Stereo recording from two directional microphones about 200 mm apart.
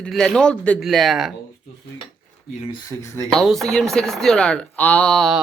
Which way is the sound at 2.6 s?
25° left (ahead or behind).